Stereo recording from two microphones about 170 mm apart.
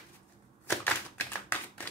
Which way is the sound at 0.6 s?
10° left (ahead or behind).